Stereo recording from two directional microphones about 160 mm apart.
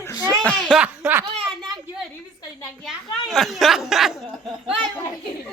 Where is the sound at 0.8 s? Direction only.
10° right (ahead or behind).